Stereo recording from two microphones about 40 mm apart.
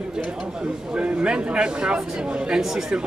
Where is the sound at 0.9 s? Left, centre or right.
Right.